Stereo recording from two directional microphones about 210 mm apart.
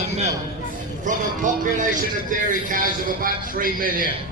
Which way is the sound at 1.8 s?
40° right (ahead or behind).